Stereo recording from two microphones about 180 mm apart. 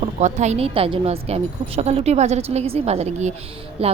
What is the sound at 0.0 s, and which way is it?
A woman's voice, 40° right (ahead or behind).